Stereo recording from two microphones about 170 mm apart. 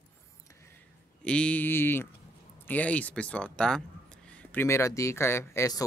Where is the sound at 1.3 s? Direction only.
5° left (ahead or behind).